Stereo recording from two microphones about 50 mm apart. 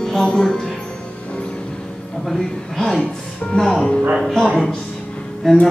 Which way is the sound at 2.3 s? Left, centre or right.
Centre.